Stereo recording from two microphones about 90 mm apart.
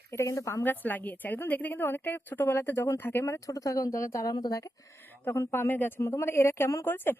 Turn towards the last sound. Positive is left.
turn(degrees=25)  # may be behind; listen again after turning